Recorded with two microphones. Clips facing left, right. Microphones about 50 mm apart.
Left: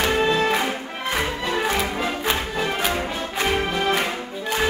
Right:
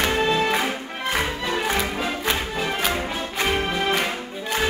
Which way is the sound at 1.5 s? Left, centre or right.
Centre.